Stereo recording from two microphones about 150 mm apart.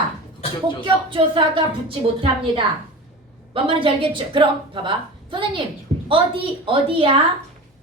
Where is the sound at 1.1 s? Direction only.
35° right (ahead or behind).